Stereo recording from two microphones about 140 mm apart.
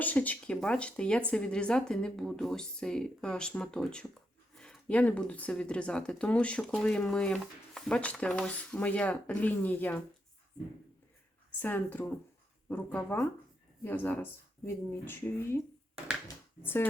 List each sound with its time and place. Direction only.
0.0 s speech: 10° left (ahead or behind)
11.6 s speech: 10° left (ahead or behind)